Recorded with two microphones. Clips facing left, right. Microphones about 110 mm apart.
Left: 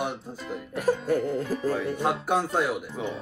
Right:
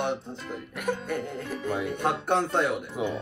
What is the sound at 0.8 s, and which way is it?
Music, 35° left (ahead or behind).